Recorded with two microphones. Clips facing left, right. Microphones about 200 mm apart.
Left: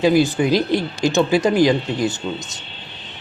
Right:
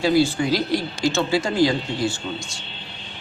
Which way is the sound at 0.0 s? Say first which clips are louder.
Left 3 dB; 15° left (ahead or behind).